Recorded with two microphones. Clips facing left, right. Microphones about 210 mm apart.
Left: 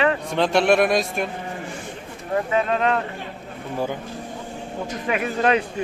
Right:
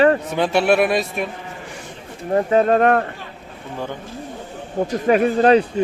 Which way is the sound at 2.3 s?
35° right (ahead or behind).